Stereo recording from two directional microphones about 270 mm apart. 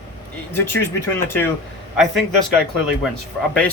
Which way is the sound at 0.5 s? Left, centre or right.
Centre.